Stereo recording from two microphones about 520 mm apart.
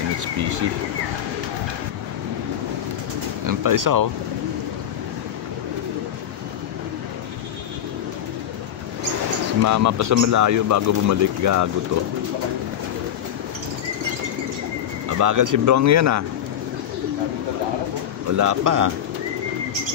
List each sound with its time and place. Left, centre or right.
0.2 s speech: right
3.4 s speech: right
9.6 s speech: right
15.0 s speech: right
18.3 s speech: right